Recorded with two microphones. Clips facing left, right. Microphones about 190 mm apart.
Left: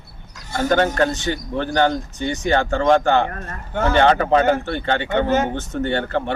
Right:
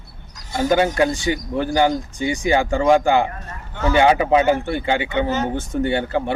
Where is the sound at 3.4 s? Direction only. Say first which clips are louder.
Left 2 dB; 50° left (ahead or behind).